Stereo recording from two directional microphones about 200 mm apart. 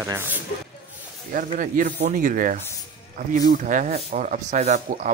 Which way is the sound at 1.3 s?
45° right (ahead or behind).